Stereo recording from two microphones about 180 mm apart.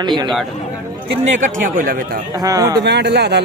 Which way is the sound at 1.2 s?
45° right (ahead or behind).